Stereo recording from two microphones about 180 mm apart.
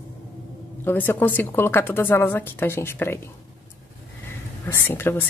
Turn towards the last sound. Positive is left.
turn(degrees=10)  # may be behind; listen again after turning